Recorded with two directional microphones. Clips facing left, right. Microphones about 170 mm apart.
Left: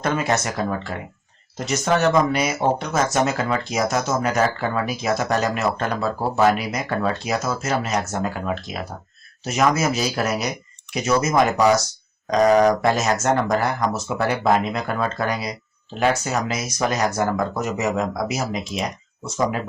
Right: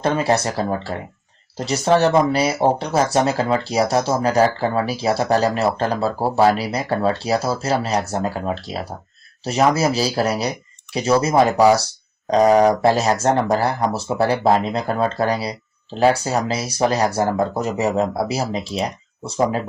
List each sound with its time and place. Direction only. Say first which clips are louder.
0.0 s speech: right 3 dB; 30° right (ahead or behind)